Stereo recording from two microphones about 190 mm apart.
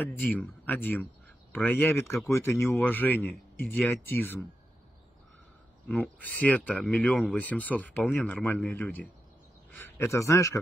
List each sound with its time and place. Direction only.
0.0 s speech: 10° left (ahead or behind)
5.9 s a man's voice: 5° left (ahead or behind)